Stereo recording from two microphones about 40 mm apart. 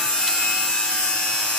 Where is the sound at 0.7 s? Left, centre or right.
Left.